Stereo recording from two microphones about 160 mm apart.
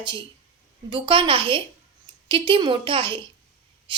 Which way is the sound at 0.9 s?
30° right (ahead or behind).